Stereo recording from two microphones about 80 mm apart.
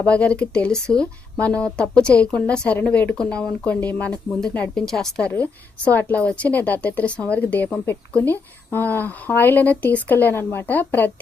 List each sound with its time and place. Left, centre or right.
0.0 s speech: centre
5.3 s a woman's voice: centre